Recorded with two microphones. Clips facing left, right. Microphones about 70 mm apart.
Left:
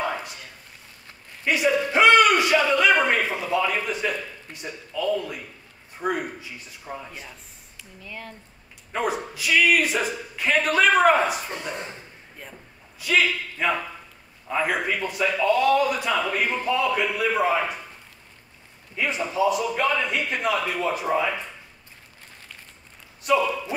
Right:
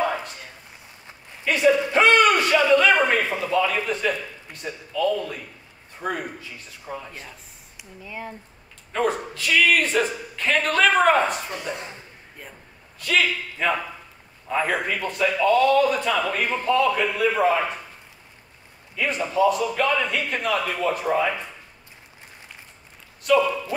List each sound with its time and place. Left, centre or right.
1.4 s speech: centre
1.9 s a sound: centre
3.3 s speech: centre
8.0 s speech: centre
8.9 s speech: centre
13.0 s speech: centre
18.9 s speech: centre
21.0 s speech: centre
23.2 s speech: centre